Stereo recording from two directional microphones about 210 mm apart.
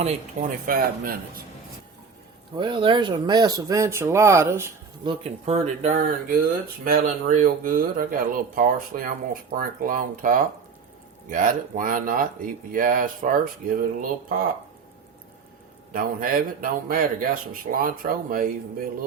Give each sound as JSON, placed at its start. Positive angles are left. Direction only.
{"t": 0.0, "sound": "speech", "side_deg": -40}
{"t": 2.6, "sound": "speech", "side_deg": -20}
{"t": 5.0, "sound": "speech", "side_deg": -30}
{"t": 15.9, "sound": "speech", "side_deg": -40}